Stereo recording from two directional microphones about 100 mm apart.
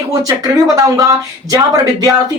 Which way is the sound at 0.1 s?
40° right (ahead or behind).